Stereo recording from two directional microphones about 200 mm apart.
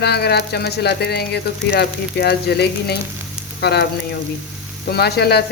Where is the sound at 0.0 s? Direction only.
55° left (ahead or behind).